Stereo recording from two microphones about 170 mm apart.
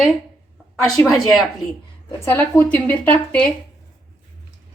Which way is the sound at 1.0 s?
Centre (ahead or behind).